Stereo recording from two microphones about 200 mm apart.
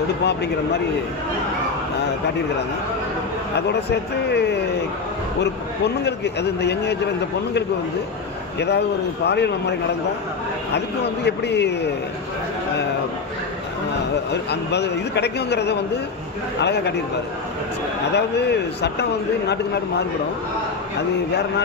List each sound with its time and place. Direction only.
0.2 s a man's voice: 55° left (ahead or behind)
3.5 s a man's voice: 55° left (ahead or behind)
8.5 s a man's voice: 55° left (ahead or behind)
11.2 s a man's voice: 60° left (ahead or behind)
14.3 s a man's voice: 60° left (ahead or behind)
18.1 s a man's voice: 55° left (ahead or behind)